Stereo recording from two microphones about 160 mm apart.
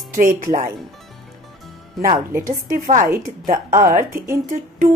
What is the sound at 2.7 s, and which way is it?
Speech, 55° right (ahead or behind).